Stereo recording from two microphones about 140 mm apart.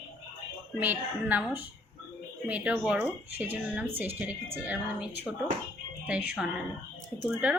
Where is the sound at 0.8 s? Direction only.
10° right (ahead or behind).